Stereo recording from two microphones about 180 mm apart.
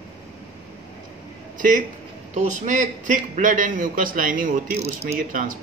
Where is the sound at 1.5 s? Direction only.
50° right (ahead or behind).